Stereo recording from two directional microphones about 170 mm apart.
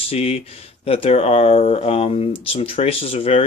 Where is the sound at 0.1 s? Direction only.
35° left (ahead or behind).